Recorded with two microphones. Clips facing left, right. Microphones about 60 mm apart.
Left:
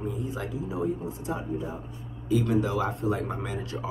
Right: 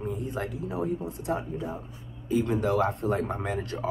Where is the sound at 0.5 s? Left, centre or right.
Right.